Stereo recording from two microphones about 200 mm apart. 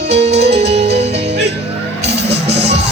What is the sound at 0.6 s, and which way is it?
Music, 30° right (ahead or behind).